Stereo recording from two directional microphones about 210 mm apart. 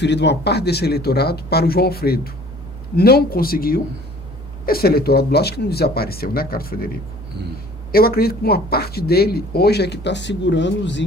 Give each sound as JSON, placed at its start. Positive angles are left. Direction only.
{"t": 0.0, "sound": "speech", "side_deg": 55}
{"t": 7.9, "sound": "speech", "side_deg": 45}